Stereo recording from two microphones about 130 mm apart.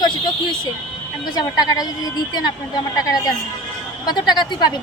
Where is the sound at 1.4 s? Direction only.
30° left (ahead or behind).